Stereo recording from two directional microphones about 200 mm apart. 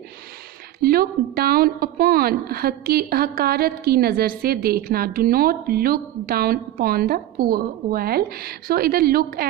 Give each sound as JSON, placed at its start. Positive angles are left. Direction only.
{"t": 0.8, "sound": "a woman's voice", "side_deg": -50}